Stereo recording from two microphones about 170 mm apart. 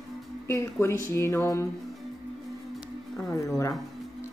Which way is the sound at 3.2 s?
20° left (ahead or behind).